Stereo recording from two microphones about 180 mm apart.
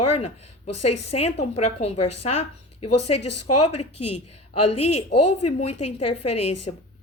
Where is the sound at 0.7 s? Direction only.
35° left (ahead or behind).